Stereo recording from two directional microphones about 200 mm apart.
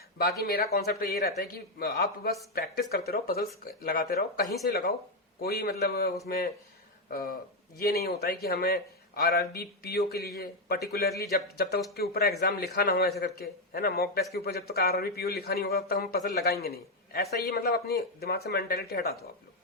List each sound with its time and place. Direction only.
0.2 s a man's voice: 50° left (ahead or behind)